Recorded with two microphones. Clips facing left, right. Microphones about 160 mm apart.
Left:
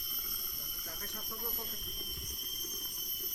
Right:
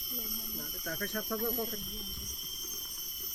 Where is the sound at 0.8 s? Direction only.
85° right.